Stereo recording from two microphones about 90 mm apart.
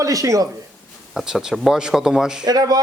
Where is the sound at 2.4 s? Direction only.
45° right (ahead or behind).